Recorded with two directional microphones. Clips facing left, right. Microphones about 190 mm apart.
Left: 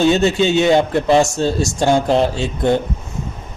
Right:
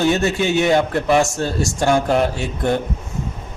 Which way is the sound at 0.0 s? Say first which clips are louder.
Left 4 dB; 25° left (ahead or behind).